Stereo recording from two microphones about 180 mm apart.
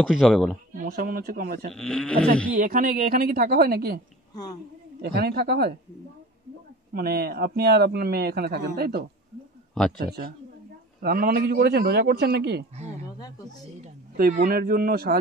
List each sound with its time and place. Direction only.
0.2 s speech: centre (ahead or behind)
0.8 s a man's voice: 60° right (ahead or behind)
1.7 s speech: 5° left (ahead or behind)
2.5 s a woman's voice: 50° right (ahead or behind)
5.0 s a man's voice: 65° right (ahead or behind)
6.9 s a man's voice: 60° right (ahead or behind)
10.0 s a man's voice: 55° right (ahead or behind)
14.1 s a man's voice: 55° right (ahead or behind)